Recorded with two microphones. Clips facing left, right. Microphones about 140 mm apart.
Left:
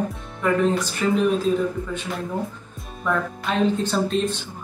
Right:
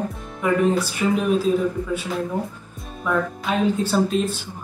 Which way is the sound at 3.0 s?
5° right (ahead or behind).